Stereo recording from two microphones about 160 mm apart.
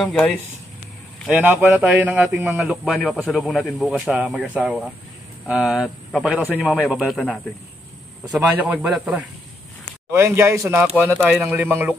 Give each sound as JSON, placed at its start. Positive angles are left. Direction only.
{"t": 1.3, "sound": "a man's voice", "side_deg": -10}
{"t": 8.3, "sound": "a man's voice", "side_deg": -10}